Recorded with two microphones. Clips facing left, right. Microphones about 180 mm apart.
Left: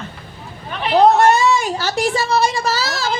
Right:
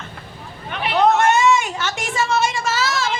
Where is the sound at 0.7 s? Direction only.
35° left (ahead or behind).